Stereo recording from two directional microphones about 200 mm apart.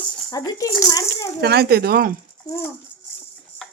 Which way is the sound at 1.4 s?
50° right (ahead or behind).